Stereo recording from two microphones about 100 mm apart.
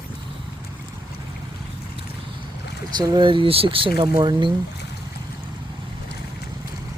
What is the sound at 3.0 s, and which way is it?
Speech, 50° right (ahead or behind).